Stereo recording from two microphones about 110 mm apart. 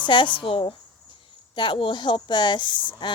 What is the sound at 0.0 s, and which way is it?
Speech, 50° left (ahead or behind).